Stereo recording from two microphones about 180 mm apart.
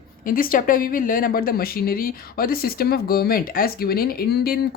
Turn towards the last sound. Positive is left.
turn(degrees=55)  # may be behind; listen again after turning